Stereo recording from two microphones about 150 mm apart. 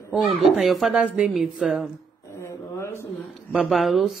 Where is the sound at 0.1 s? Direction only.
Centre (ahead or behind).